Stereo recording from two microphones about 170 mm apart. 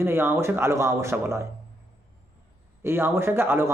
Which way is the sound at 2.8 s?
15° right (ahead or behind).